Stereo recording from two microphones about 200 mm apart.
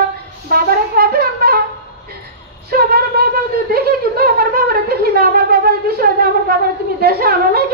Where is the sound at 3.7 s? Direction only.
50° right (ahead or behind).